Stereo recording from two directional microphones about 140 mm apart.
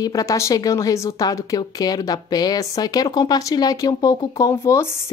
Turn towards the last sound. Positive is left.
turn(degrees=20)  # may be behind; listen again after turning